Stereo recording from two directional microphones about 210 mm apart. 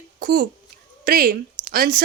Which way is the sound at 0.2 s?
45° right (ahead or behind).